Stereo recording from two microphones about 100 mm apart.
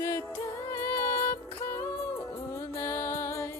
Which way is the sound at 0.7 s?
25° left (ahead or behind).